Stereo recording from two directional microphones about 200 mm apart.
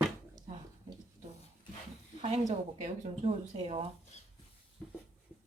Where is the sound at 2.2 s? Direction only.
35° right (ahead or behind).